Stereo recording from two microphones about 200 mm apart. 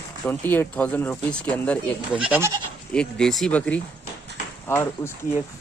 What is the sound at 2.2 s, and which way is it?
Speech, 10° right (ahead or behind).